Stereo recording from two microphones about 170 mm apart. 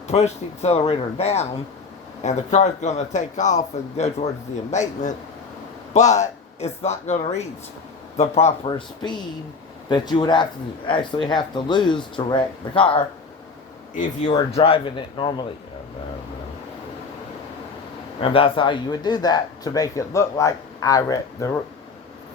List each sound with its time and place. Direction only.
0.1 s a man's voice: 40° left (ahead or behind)
8.6 s speech: 25° left (ahead or behind)
13.9 s a man's voice: 50° left (ahead or behind)
14.3 s speech: 35° left (ahead or behind)
18.2 s speech: 30° left (ahead or behind)